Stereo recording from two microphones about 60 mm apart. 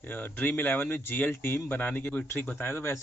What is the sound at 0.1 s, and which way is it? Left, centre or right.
A man's voice, left.